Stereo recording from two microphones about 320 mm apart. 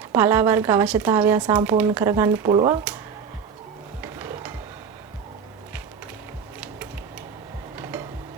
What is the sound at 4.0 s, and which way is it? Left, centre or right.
Music, centre.